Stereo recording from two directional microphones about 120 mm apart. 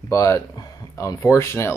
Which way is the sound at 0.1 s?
25° left (ahead or behind).